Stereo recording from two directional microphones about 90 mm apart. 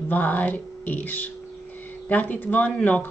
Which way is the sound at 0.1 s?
20° left (ahead or behind).